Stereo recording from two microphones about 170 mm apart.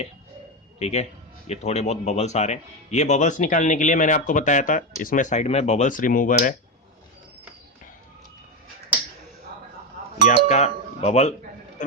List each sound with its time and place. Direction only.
0.8 s a man's voice: 40° left (ahead or behind)
10.2 s speech: 40° left (ahead or behind)
11.8 s a sound: 50° left (ahead or behind)